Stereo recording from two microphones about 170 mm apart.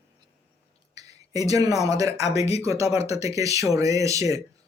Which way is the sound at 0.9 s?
20° right (ahead or behind).